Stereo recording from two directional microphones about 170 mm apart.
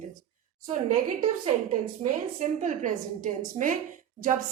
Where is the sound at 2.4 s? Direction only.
50° right (ahead or behind).